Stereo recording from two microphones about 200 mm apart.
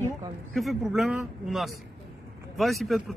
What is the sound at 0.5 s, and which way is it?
Speech, centre (ahead or behind).